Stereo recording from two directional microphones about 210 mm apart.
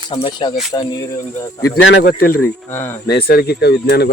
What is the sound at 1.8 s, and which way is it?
Speech, 55° left (ahead or behind).